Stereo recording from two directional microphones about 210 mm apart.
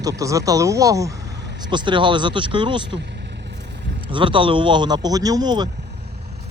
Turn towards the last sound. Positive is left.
turn(degrees=-20)  # may be behind; listen again after turning